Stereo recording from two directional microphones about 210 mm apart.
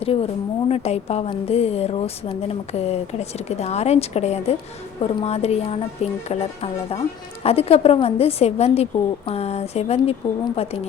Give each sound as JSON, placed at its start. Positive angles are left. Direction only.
{"t": 0.0, "sound": "a woman's voice", "side_deg": 25}